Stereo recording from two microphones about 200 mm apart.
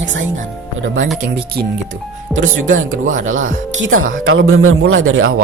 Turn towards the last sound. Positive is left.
turn(degrees=-90)